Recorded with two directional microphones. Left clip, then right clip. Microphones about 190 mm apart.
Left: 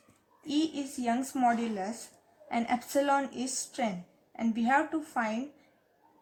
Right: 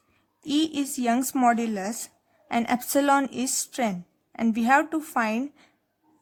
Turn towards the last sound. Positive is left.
turn(degrees=-45)  # may be behind; listen again after turning